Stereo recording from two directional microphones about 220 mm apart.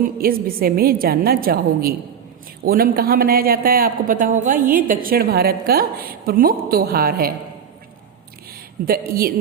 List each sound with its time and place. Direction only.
0.2 s speech: 40° right (ahead or behind)
8.9 s speech: 40° right (ahead or behind)